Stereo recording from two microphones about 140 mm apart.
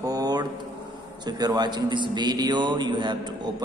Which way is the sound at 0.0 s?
25° right (ahead or behind).